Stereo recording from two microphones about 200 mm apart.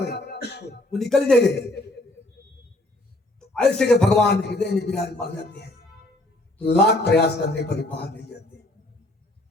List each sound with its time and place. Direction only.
0.0 s a sound: 55° left (ahead or behind)
0.9 s a man's voice: centre (ahead or behind)
1.5 s a man's voice: 55° left (ahead or behind)
3.5 s a man's voice: 5° left (ahead or behind)
4.3 s a man's voice: 55° left (ahead or behind)